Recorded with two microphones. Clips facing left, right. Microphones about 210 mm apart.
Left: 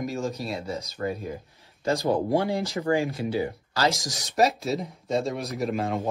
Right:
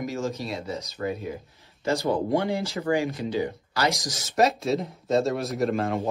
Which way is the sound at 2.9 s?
15° right (ahead or behind).